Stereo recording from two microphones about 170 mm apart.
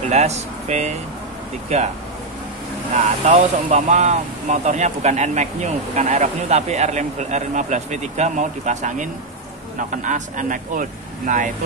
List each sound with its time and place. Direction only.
0.1 s speech: 40° right (ahead or behind)
2.9 s speech: 45° right (ahead or behind)